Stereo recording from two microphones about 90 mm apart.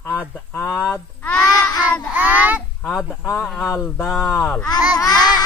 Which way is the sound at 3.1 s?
25° left (ahead or behind).